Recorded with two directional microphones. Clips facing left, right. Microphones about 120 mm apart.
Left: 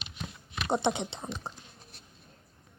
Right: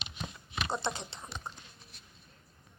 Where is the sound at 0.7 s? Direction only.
20° left (ahead or behind).